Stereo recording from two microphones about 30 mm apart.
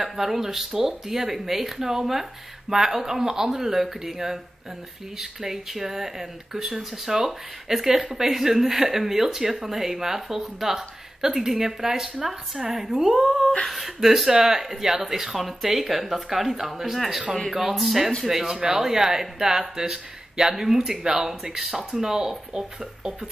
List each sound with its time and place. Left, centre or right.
0.0 s speech: centre